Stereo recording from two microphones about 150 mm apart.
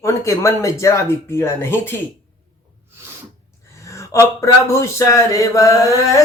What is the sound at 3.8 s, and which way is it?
A man's voice, 20° left (ahead or behind).